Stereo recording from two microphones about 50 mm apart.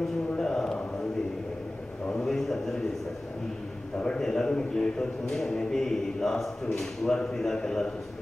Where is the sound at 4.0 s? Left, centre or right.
Centre.